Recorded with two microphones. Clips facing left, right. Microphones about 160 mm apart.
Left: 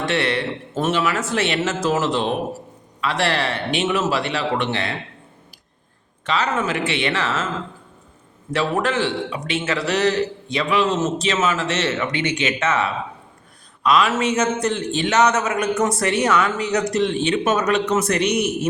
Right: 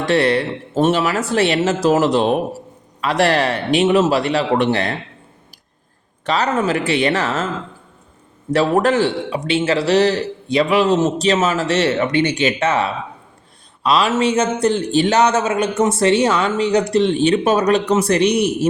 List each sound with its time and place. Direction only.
0.0 s a man's voice: 35° right (ahead or behind)
6.2 s a man's voice: 35° right (ahead or behind)
8.5 s a man's voice: 40° right (ahead or behind)